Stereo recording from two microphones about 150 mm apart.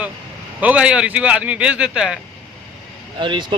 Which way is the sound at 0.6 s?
10° right (ahead or behind).